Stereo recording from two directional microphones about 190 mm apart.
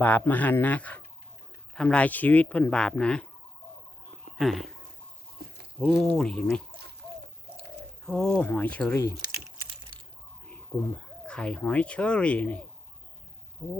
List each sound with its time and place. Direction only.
0.0 s speech: 10° left (ahead or behind)
4.4 s speech: centre (ahead or behind)
5.4 s a sound: 55° right (ahead or behind)
5.8 s speech: centre (ahead or behind)
8.0 s speech: 5° left (ahead or behind)
11.3 s speech: 5° left (ahead or behind)